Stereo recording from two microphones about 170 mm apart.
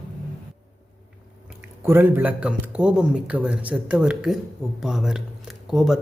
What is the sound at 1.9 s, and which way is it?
Speech, 10° right (ahead or behind).